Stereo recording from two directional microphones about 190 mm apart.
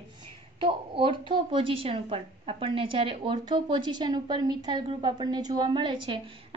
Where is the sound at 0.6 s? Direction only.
25° right (ahead or behind).